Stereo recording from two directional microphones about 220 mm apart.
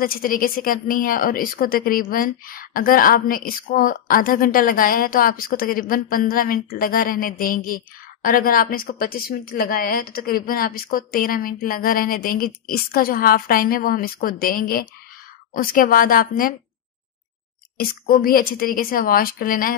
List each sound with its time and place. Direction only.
0.0 s speech: 40° left (ahead or behind)
17.7 s speech: 40° left (ahead or behind)